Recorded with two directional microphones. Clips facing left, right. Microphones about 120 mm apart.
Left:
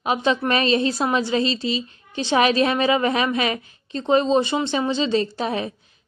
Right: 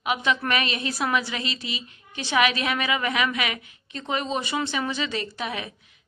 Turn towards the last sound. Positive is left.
turn(degrees=35)  # may be behind; listen again after turning